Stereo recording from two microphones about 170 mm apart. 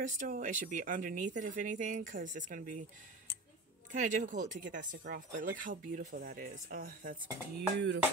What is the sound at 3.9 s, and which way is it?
Speech, 45° right (ahead or behind).